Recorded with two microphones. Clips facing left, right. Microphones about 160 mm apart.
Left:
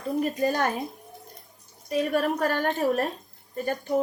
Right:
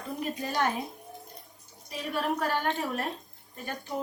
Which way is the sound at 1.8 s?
50° left (ahead or behind).